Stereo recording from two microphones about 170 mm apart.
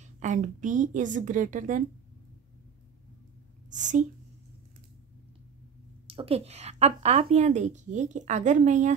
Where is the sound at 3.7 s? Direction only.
45° right (ahead or behind).